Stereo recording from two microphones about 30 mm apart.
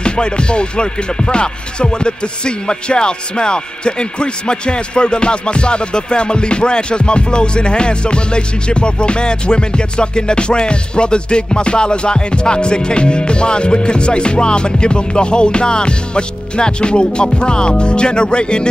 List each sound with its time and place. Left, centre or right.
0.0 s music: left